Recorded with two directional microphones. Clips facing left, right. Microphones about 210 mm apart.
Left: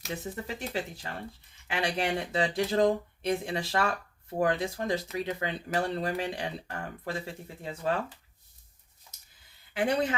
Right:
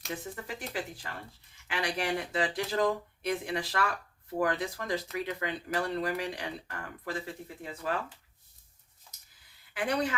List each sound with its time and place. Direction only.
0.1 s speech: 25° left (ahead or behind)
9.7 s speech: 25° left (ahead or behind)